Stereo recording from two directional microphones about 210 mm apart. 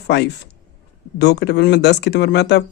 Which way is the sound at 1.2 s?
55° left (ahead or behind).